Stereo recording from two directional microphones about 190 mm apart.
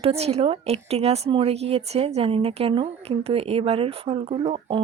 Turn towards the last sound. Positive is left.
turn(degrees=-30)  # may be behind; listen again after turning